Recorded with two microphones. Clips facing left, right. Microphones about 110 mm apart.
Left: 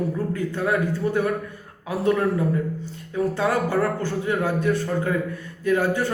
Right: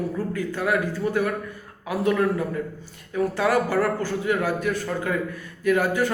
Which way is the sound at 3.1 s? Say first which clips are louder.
Right 1 dB; 25° left (ahead or behind).